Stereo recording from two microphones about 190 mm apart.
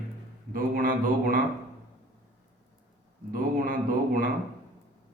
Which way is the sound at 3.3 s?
50° right (ahead or behind).